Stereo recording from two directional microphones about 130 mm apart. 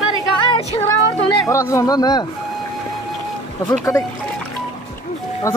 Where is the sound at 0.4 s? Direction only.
45° left (ahead or behind).